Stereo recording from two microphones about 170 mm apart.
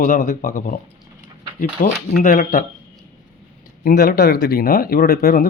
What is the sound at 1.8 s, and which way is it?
Speech, 55° left (ahead or behind).